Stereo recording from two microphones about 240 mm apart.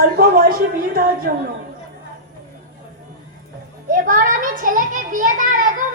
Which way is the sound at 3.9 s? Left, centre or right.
Right.